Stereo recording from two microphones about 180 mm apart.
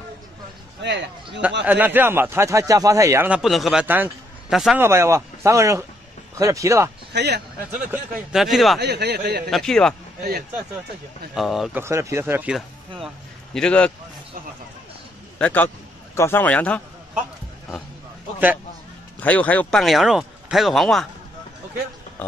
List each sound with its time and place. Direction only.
0.8 s a man's voice: 75° right (ahead or behind)
1.6 s speech: 10° right (ahead or behind)
4.8 s speech: 15° right (ahead or behind)
7.1 s a man's voice: 70° right (ahead or behind)
7.9 s speech: 5° right (ahead or behind)
8.7 s speech: 65° right (ahead or behind)
9.5 s speech: 5° left (ahead or behind)
11.3 s speech: centre (ahead or behind)
11.8 s speech: 15° right (ahead or behind)
13.0 s a man's voice: 5° left (ahead or behind)
15.3 s a man's voice: 10° left (ahead or behind)
19.1 s speech: 10° left (ahead or behind)